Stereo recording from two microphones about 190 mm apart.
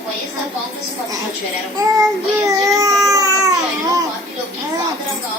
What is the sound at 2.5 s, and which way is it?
Child singing, 20° right (ahead or behind).